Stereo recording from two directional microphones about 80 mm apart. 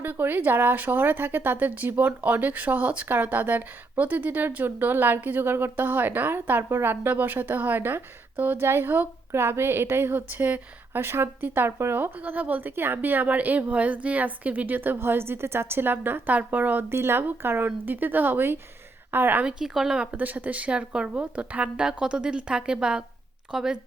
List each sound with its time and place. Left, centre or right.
0.0 s speech: right
19.5 s speech: centre
20.1 s speech: right